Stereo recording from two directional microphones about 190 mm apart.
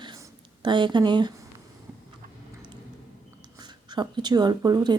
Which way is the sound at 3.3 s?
20° right (ahead or behind).